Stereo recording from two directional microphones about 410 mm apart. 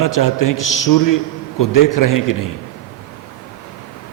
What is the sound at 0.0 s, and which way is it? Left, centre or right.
A man's voice, left.